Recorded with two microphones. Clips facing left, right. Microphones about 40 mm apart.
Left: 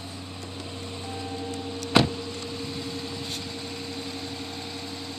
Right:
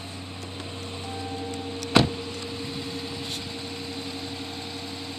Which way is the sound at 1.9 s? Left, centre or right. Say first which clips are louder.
Even; centre.